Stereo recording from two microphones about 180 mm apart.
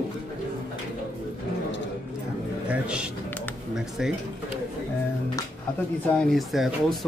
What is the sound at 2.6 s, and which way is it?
A man's voice, 5° right (ahead or behind).